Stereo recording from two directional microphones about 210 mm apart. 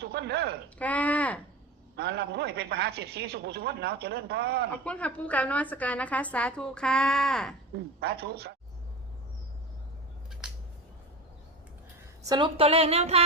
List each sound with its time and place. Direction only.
0.0 s speech: 50° right (ahead or behind)
0.8 s a woman's voice: 5° left (ahead or behind)
2.0 s a man's voice: 50° right (ahead or behind)
4.8 s a woman's voice: 5° left (ahead or behind)
7.9 s a man's voice: 50° right (ahead or behind)
12.2 s speech: 20° right (ahead or behind)